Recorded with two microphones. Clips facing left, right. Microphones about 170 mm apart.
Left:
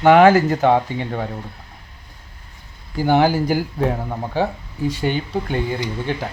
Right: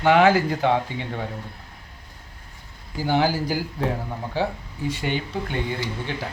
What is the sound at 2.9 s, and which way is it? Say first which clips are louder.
Speech: left 6 dB; 55° left (ahead or behind).